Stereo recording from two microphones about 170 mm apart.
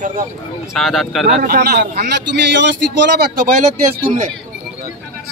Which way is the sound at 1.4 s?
70° right (ahead or behind).